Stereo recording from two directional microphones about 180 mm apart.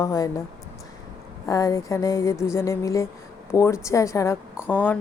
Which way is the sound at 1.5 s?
20° left (ahead or behind).